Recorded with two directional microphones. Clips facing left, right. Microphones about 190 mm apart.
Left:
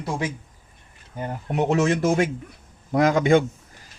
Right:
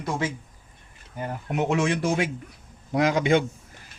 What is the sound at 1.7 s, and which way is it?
Speech, 40° left (ahead or behind).